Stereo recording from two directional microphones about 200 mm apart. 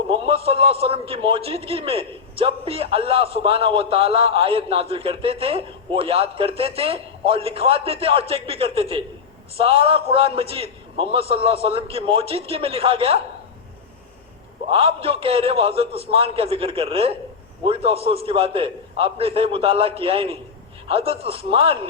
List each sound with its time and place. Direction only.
0.1 s a man's voice: 30° right (ahead or behind)
14.7 s a man's voice: 25° right (ahead or behind)